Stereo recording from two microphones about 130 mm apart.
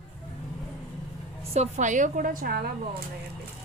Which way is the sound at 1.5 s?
60° right (ahead or behind).